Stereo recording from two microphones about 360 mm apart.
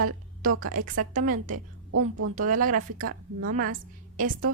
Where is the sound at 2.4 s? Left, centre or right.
Right.